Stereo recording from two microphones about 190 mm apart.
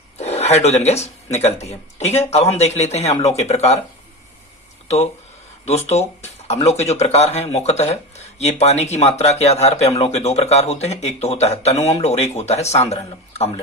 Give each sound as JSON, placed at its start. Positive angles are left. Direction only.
{"t": 0.2, "sound": "speech", "side_deg": 35}
{"t": 5.6, "sound": "speech", "side_deg": 35}